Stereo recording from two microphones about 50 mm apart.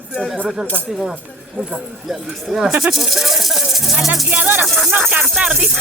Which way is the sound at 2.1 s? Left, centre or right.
Centre.